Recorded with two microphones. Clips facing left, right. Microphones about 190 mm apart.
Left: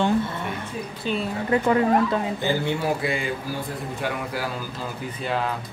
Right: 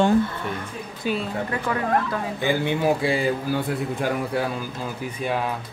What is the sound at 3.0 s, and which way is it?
Speech, 30° right (ahead or behind).